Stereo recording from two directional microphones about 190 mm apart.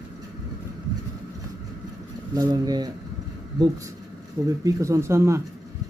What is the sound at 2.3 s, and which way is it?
Speech, 20° right (ahead or behind).